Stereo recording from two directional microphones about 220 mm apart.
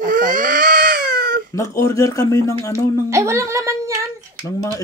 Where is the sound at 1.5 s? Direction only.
15° left (ahead or behind).